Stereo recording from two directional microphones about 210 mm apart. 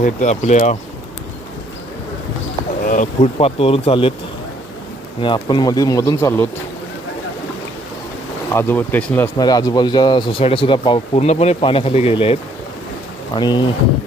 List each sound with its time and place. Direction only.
0.0 s speech: 35° left (ahead or behind)
2.8 s speech: 40° left (ahead or behind)
5.2 s speech: 20° left (ahead or behind)
8.5 s speech: 10° left (ahead or behind)